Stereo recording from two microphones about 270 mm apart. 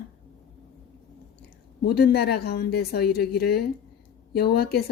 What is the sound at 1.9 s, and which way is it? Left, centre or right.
Speech, left.